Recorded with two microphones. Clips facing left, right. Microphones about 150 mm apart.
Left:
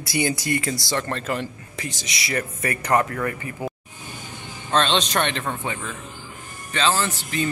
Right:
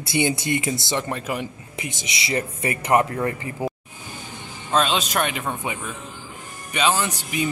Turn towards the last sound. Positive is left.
turn(degrees=-15)  # may be behind; listen again after turning